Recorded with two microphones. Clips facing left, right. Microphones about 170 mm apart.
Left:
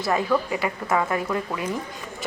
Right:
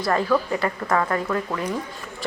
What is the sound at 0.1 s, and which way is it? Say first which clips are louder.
A woman's voice: right 1 dB; 10° left (ahead or behind).